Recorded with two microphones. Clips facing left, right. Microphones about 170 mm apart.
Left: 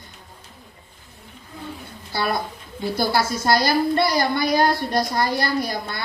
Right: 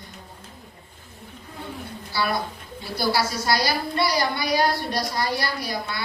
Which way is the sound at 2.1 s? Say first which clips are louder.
Left 1 dB; 50° left (ahead or behind).